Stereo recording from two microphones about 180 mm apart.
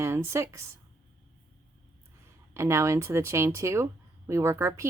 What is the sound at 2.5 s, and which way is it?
A woman's voice, 15° right (ahead or behind).